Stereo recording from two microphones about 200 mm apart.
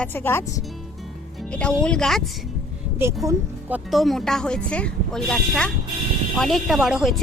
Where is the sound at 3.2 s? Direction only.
15° right (ahead or behind).